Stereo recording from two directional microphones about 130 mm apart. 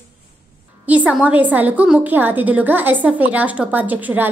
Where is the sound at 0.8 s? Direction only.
10° right (ahead or behind).